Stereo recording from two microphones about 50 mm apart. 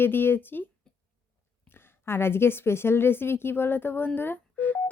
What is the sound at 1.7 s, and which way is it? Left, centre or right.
A woman's voice, left.